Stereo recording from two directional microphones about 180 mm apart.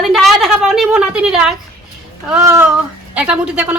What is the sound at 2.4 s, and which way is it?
A woman's voice, 15° right (ahead or behind).